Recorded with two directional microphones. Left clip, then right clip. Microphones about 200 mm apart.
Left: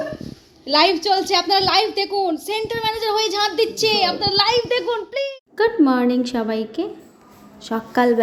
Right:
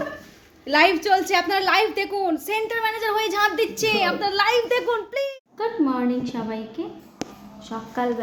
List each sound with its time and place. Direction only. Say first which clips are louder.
0.6 s a woman's voice: left 2 dB; 10° right (ahead or behind)
5.5 s a woman's voice: left 7 dB; 35° left (ahead or behind)